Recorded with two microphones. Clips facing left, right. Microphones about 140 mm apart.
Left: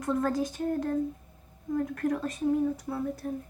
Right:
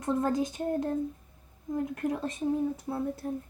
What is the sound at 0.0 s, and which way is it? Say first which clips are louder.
Speech: even; 20° right (ahead or behind).